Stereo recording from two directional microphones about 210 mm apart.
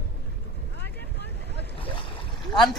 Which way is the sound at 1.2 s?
55° right (ahead or behind).